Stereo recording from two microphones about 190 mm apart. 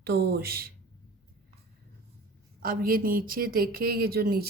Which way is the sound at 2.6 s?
50° right (ahead or behind).